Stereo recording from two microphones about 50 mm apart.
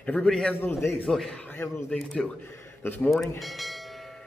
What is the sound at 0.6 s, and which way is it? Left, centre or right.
Speech, left.